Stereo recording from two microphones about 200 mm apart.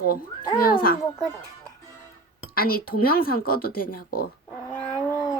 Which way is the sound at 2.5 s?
50° left (ahead or behind).